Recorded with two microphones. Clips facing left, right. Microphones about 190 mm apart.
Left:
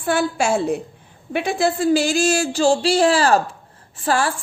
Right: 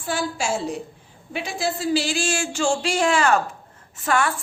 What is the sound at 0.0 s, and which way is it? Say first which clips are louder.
Speech: left 6 dB; 60° left (ahead or behind).